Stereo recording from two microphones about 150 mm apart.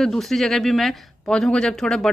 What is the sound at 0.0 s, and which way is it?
Speech, centre (ahead or behind).